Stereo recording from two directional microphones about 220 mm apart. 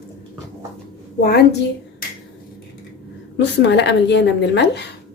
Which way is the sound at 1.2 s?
45° left (ahead or behind).